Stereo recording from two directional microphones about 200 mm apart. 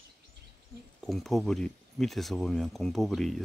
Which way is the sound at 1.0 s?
Centre (ahead or behind).